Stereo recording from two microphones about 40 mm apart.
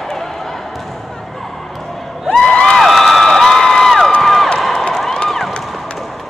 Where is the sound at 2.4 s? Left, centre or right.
Centre.